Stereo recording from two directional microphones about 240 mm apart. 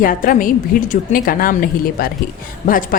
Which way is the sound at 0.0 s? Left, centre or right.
Left.